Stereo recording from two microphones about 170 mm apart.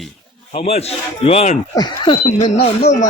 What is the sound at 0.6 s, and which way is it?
A man's voice, 40° left (ahead or behind).